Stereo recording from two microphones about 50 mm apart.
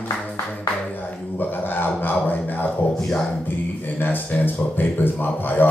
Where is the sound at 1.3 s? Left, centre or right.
Left.